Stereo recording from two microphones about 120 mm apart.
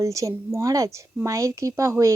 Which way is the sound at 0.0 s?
25° right (ahead or behind).